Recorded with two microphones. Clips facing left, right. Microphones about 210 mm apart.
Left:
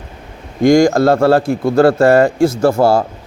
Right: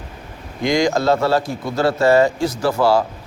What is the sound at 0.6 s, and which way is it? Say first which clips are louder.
A man's voice: left 8 dB; 50° left (ahead or behind).